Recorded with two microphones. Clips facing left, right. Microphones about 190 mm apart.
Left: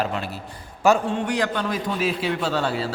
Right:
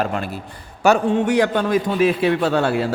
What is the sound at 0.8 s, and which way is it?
A man's voice, 65° right (ahead or behind).